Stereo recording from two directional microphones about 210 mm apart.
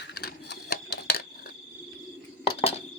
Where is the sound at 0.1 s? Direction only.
50° left (ahead or behind).